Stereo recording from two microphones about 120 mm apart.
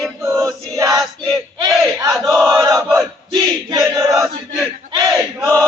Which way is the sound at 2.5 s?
30° right (ahead or behind).